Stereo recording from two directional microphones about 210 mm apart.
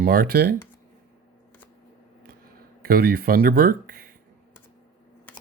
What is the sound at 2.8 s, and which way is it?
Speech, 45° right (ahead or behind).